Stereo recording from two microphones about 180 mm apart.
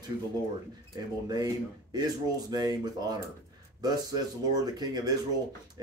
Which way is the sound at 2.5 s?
20° right (ahead or behind).